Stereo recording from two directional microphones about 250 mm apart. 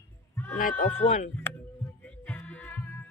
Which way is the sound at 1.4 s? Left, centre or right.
Centre.